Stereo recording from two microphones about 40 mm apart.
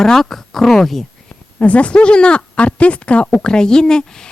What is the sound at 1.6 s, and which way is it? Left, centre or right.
Speech, left.